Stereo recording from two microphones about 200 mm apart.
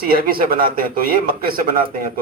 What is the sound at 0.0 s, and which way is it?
Speech, 45° right (ahead or behind).